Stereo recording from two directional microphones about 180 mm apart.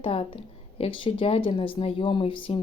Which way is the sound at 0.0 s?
30° left (ahead or behind).